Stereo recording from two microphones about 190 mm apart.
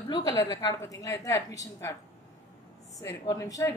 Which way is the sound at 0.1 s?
20° left (ahead or behind).